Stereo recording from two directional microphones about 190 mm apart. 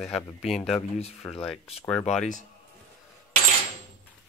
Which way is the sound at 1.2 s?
10° left (ahead or behind).